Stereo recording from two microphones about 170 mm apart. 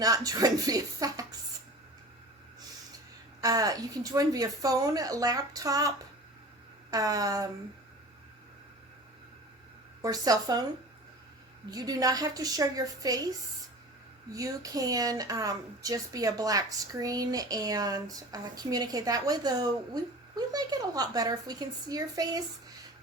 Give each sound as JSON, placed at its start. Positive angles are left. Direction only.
{"t": 0.0, "sound": "a woman's voice", "side_deg": -20}
{"t": 3.4, "sound": "a woman's voice", "side_deg": -20}
{"t": 6.9, "sound": "a woman's voice", "side_deg": -20}
{"t": 10.0, "sound": "a woman's voice", "side_deg": -20}
{"t": 11.7, "sound": "a woman's voice", "side_deg": -20}
{"t": 14.3, "sound": "a woman's voice", "side_deg": -20}